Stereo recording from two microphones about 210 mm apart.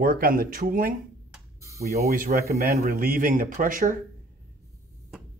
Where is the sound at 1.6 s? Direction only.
15° right (ahead or behind).